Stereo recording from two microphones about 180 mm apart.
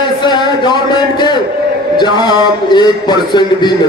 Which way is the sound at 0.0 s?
25° left (ahead or behind).